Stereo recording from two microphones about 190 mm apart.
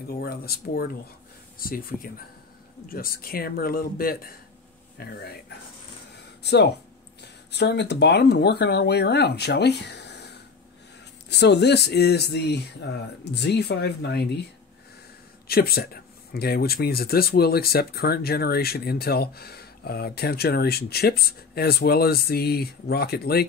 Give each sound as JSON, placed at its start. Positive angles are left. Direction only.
{"t": 0.2, "sound": "a man's voice", "side_deg": 55}
{"t": 6.4, "sound": "speech", "side_deg": 60}
{"t": 15.4, "sound": "speech", "side_deg": 55}